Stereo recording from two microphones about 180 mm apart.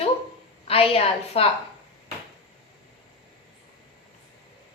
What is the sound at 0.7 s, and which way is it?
Speech, 30° left (ahead or behind).